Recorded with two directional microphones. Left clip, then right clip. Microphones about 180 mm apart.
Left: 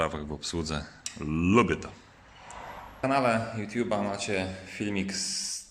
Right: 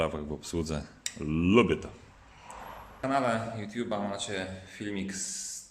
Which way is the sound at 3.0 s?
5° left (ahead or behind).